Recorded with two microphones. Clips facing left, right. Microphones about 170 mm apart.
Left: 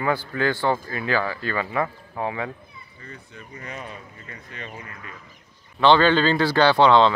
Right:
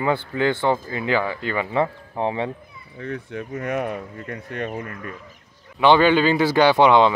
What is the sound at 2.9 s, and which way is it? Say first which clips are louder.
Speech: right 14 dB; 75° right (ahead or behind).